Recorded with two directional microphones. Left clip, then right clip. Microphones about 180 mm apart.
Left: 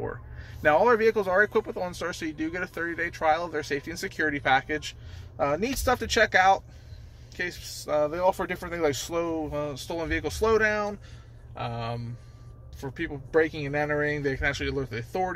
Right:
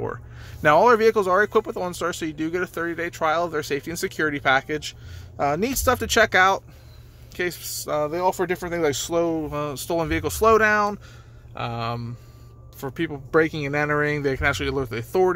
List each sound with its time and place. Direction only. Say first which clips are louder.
0.0 s speech: right 5 dB; 30° right (ahead or behind)
7.9 s speech: right 1 dB; 25° right (ahead or behind); by 15.3 s 40° right (ahead or behind)